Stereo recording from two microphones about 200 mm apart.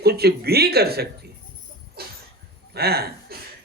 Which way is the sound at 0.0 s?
50° right (ahead or behind).